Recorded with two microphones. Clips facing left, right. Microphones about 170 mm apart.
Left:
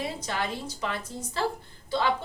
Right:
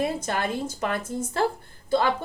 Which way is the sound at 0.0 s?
50° right (ahead or behind).